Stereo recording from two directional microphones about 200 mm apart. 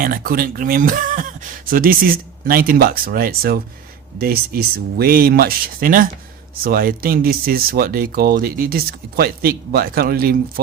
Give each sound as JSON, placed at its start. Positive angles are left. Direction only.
{"t": 0.0, "sound": "speech", "side_deg": -45}